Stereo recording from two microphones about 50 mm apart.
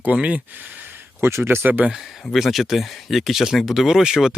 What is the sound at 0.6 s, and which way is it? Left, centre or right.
Speech, right.